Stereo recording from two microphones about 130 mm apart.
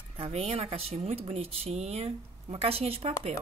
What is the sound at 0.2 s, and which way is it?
Speech, 55° right (ahead or behind).